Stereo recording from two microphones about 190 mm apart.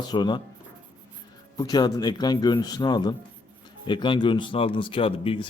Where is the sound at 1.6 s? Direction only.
20° left (ahead or behind).